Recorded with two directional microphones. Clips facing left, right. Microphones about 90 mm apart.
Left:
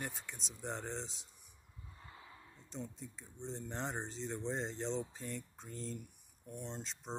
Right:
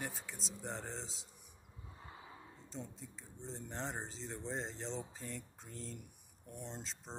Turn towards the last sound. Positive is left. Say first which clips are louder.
# left 3 dB
turn(degrees=0)  # may be behind; listen again after turning